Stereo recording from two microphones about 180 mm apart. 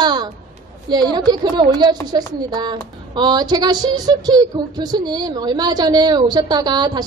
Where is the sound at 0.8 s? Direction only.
25° right (ahead or behind).